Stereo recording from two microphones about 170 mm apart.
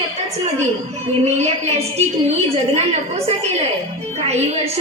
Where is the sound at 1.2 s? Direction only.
40° right (ahead or behind).